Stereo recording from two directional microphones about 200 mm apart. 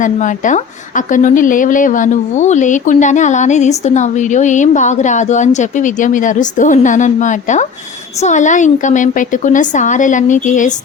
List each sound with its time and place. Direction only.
0.0 s a woman's voice: 40° left (ahead or behind)